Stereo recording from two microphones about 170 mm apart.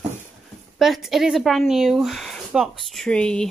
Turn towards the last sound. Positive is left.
turn(degrees=5)  # may be behind; listen again after turning